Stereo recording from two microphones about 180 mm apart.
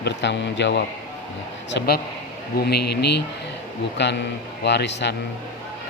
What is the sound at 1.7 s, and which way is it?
Speech, 65° left (ahead or behind).